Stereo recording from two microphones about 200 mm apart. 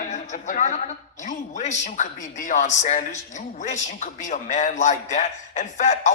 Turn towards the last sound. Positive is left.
turn(degrees=35)  # may be behind; listen again after turning